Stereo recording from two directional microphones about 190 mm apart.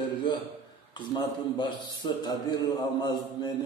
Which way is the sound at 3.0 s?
20° left (ahead or behind).